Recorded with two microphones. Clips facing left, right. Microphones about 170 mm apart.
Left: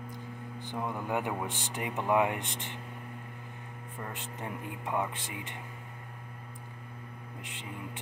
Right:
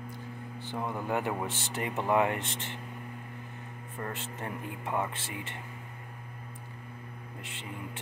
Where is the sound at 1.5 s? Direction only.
15° left (ahead or behind).